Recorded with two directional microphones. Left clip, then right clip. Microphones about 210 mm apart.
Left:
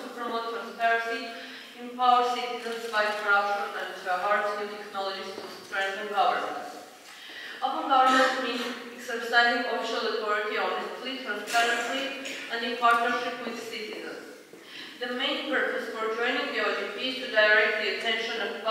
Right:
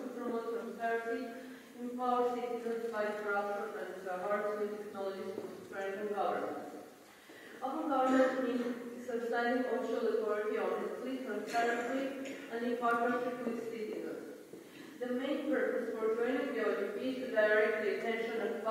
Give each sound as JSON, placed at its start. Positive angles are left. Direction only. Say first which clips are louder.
{"t": 0.4, "sound": "a man's voice", "louder": "left 12 dB", "side_deg": -10}
{"t": 7.6, "sound": "a man's voice", "louder": "left 10 dB", "side_deg": -15}
{"t": 15.0, "sound": "a man's voice", "louder": "left 7 dB", "side_deg": -10}